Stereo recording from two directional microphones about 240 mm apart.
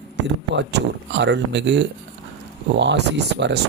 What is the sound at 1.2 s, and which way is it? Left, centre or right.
Speech, right.